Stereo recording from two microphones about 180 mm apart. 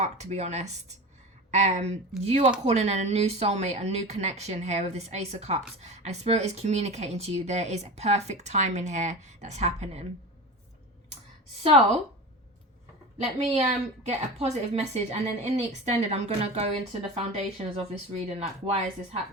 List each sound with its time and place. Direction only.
0.0 s speech: 40° right (ahead or behind)
13.1 s speech: 35° right (ahead or behind)